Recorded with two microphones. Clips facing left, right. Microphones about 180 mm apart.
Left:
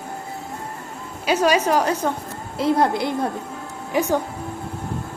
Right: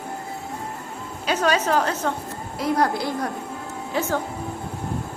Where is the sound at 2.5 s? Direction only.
25° left (ahead or behind).